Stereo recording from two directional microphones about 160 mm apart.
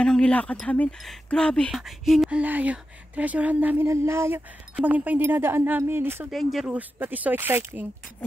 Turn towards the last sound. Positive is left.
turn(degrees=-15)  # may be behind; listen again after turning